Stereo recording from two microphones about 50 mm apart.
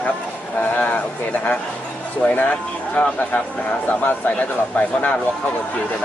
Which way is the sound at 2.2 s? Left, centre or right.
Left.